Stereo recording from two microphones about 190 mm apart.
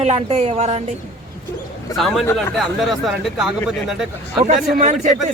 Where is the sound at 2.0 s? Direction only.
Centre (ahead or behind).